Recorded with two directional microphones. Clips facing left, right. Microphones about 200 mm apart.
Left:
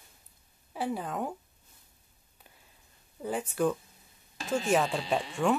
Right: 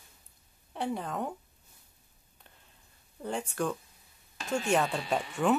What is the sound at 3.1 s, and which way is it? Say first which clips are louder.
Speech: left 2 dB; 5° left (ahead or behind).